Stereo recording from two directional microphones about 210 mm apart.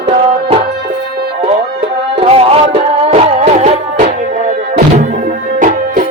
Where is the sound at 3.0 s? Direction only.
30° right (ahead or behind).